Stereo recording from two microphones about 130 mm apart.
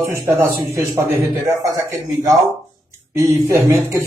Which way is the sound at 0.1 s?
20° right (ahead or behind).